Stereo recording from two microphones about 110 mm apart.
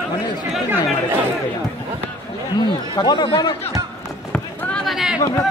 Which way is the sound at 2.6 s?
40° left (ahead or behind).